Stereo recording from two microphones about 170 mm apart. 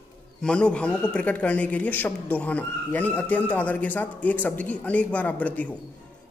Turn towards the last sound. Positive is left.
turn(degrees=10)  # may be behind; listen again after turning